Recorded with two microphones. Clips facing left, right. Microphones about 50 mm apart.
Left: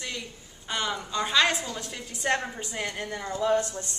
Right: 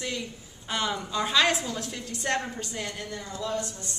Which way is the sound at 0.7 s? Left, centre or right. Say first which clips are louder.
Right 1 dB; centre.